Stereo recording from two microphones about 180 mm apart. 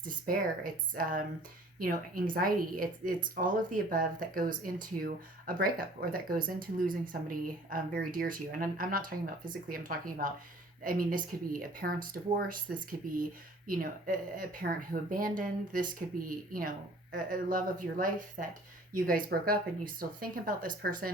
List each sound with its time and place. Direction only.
0.0 s speech: 50° right (ahead or behind)